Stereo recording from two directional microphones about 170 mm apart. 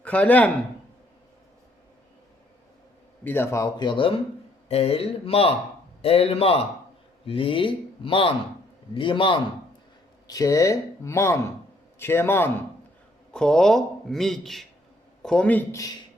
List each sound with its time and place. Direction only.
0.0 s a man's voice: 10° left (ahead or behind)
3.2 s a man's voice: 15° left (ahead or behind)